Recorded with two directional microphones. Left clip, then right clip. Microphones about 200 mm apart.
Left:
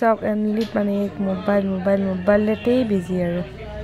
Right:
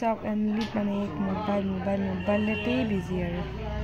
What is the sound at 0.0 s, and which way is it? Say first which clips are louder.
A man's voice: left 9 dB; 15° left (ahead or behind).